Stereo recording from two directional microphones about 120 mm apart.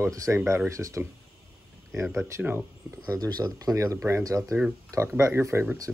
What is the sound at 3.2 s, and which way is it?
Speech, 35° right (ahead or behind).